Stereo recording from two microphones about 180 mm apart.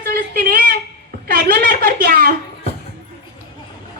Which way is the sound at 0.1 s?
55° right (ahead or behind).